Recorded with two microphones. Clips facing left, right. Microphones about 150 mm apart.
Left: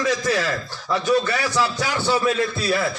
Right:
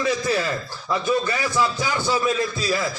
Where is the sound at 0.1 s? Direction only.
90° left.